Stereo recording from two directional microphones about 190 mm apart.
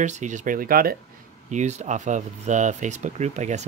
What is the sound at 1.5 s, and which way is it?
Speech, 40° right (ahead or behind).